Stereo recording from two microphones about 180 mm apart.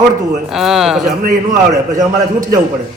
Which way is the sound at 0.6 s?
Centre (ahead or behind).